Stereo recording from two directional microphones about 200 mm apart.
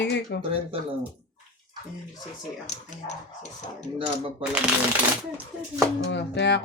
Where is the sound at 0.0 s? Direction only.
60° left (ahead or behind).